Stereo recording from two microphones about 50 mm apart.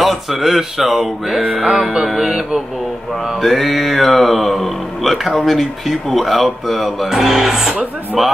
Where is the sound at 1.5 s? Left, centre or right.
Centre.